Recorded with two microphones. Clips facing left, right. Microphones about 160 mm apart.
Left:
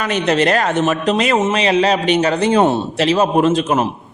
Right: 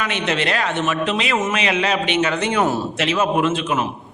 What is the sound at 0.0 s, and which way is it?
A man's voice, 40° left (ahead or behind).